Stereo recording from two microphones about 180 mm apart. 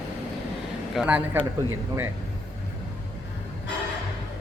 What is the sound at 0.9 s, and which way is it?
Speech, 5° right (ahead or behind).